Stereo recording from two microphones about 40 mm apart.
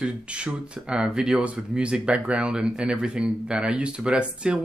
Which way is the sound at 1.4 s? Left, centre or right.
Right.